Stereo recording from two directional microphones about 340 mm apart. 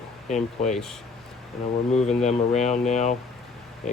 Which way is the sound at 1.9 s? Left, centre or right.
Centre.